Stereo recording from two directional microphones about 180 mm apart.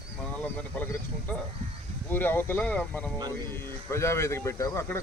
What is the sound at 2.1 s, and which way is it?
Speech, 10° left (ahead or behind).